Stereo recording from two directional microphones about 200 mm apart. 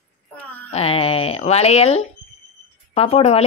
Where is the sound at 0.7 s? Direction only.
30° left (ahead or behind).